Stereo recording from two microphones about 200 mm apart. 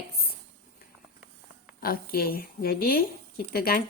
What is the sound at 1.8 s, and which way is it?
Speech, 50° left (ahead or behind).